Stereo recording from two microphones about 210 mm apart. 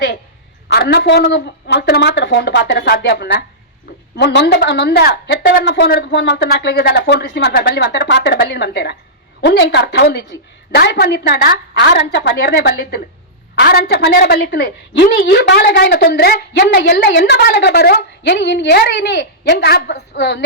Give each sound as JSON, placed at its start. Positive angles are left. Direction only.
{"t": 0.7, "sound": "a woman's voice", "side_deg": 50}